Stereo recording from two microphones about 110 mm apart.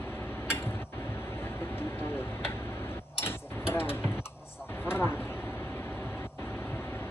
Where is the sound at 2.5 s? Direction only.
25° left (ahead or behind).